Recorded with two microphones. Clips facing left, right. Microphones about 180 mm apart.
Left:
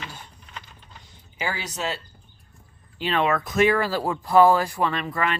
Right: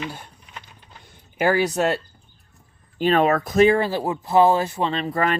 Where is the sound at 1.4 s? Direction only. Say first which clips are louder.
Right 11 dB; 55° right (ahead or behind).